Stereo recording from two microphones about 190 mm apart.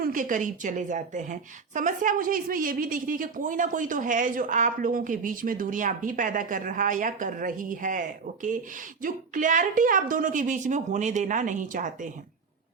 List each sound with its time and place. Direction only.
0.0 s a woman's voice: 45° right (ahead or behind)